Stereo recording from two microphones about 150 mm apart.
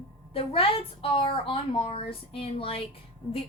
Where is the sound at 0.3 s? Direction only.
35° left (ahead or behind).